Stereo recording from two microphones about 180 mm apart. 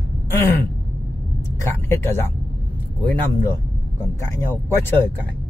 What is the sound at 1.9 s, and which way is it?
Speech, 15° left (ahead or behind).